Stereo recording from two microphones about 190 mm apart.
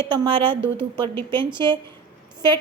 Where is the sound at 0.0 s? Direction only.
25° right (ahead or behind).